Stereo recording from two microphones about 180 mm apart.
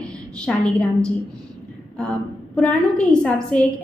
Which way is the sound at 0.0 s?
5° left (ahead or behind).